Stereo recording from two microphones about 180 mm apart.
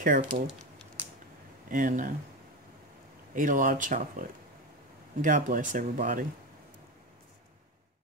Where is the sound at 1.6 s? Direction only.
50° right (ahead or behind).